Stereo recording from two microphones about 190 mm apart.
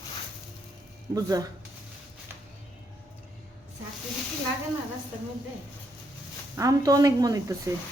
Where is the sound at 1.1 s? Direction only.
20° right (ahead or behind).